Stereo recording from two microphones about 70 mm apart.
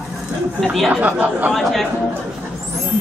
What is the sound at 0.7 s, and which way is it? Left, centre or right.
Speech, centre.